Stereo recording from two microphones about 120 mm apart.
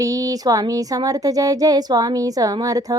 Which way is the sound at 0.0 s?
30° right (ahead or behind).